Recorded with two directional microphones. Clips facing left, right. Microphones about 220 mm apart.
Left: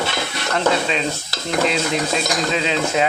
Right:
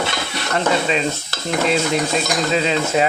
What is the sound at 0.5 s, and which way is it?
Stir, centre (ahead or behind).